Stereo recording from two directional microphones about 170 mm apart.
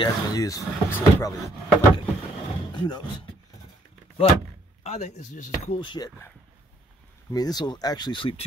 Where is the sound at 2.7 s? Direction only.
25° left (ahead or behind).